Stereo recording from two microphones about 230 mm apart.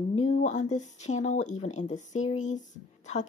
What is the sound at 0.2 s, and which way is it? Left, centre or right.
Speech, left.